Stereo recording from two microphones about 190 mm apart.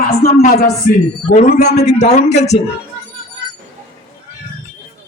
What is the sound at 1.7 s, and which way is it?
Speech, 35° left (ahead or behind).